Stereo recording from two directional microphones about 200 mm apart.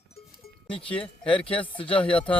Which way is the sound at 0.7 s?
5° left (ahead or behind).